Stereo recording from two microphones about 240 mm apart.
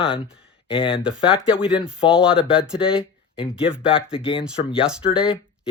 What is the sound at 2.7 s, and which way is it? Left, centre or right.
Speech, left.